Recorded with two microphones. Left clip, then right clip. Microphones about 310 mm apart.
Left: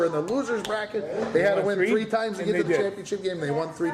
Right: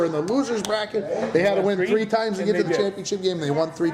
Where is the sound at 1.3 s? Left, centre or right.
Right.